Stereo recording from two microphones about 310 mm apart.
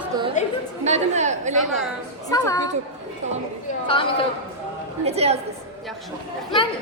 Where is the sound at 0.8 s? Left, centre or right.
Right.